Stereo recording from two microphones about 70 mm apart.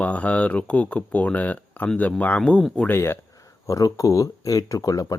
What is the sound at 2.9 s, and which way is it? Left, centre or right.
Speech, left.